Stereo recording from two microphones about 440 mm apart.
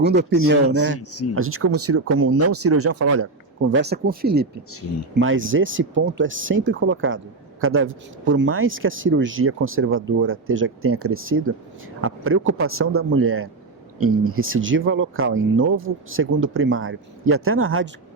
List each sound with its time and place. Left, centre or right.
0.0 s speech: right
0.9 s speech: left
1.4 s speech: right